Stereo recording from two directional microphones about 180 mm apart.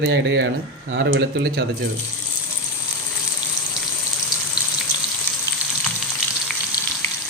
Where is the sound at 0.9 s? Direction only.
90° right; by 1.6 s 70° right (ahead or behind).